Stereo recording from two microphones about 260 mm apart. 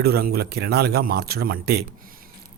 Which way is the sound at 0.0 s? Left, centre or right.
Right.